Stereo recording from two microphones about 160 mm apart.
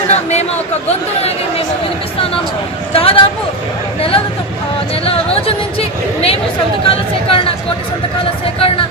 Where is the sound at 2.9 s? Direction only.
35° left (ahead or behind).